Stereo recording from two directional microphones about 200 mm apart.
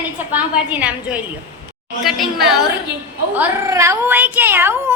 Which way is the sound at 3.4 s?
15° right (ahead or behind).